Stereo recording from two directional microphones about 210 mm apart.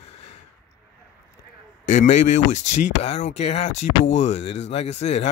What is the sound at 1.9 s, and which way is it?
Speech, 35° left (ahead or behind).